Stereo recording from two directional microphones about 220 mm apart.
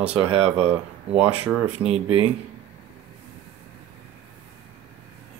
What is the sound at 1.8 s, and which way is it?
Speech, 25° right (ahead or behind).